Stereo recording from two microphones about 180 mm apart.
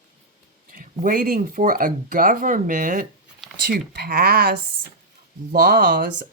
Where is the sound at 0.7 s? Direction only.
50° right (ahead or behind).